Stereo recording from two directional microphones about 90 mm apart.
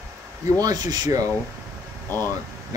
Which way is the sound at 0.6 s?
45° right (ahead or behind).